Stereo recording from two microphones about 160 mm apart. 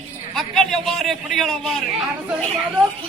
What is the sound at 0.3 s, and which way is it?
A man's voice, centre (ahead or behind).